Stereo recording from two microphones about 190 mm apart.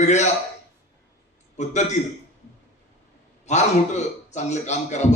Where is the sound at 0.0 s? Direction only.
35° left (ahead or behind).